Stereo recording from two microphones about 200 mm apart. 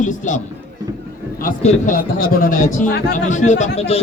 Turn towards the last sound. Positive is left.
turn(degrees=30)  # may be behind; listen again after turning